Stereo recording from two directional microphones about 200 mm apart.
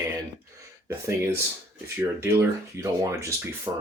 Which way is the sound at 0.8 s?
15° right (ahead or behind).